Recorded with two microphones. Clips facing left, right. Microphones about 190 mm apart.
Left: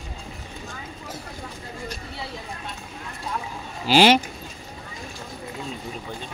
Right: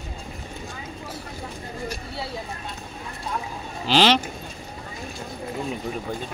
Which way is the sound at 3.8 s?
10° left (ahead or behind).